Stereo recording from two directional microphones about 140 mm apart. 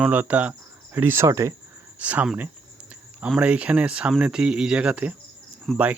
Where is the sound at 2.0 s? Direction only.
10° right (ahead or behind).